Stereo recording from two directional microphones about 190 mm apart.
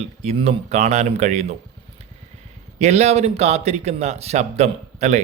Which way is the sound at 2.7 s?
35° right (ahead or behind).